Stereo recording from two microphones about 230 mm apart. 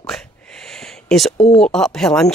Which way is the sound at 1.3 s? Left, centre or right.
Left.